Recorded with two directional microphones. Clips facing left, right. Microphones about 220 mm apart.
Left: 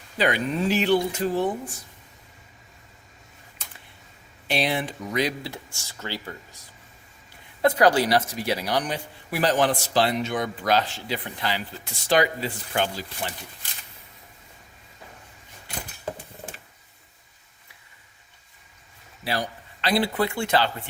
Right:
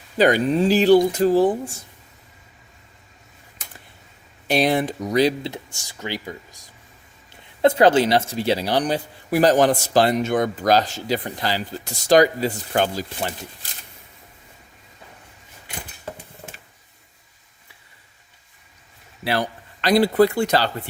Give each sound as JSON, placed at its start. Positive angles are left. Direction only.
{"t": 0.2, "sound": "speech", "side_deg": -40}
{"t": 4.4, "sound": "speech", "side_deg": -45}
{"t": 5.4, "sound": "speech", "side_deg": -20}
{"t": 7.6, "sound": "speech", "side_deg": -25}
{"t": 19.2, "sound": "a man's voice", "side_deg": -65}
{"t": 19.8, "sound": "speech", "side_deg": -40}